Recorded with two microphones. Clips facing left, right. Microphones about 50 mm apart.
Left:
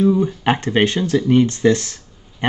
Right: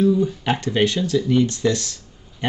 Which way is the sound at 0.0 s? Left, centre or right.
Left.